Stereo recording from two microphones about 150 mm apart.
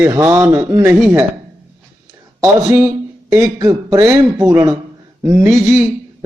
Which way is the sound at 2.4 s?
20° right (ahead or behind).